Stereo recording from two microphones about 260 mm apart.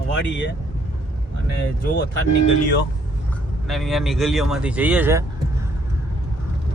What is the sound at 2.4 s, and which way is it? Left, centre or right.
Speech, left.